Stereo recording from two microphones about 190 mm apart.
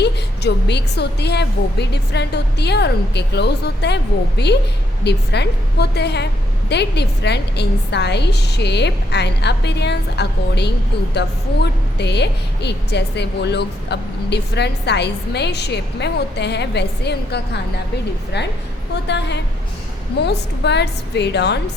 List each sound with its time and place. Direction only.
0.0 s a woman's voice: 60° left (ahead or behind)
19.0 s a woman's voice: 65° left (ahead or behind)